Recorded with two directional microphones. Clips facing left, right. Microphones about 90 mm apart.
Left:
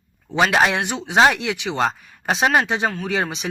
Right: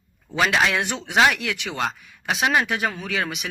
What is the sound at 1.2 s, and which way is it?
Speech, 30° left (ahead or behind).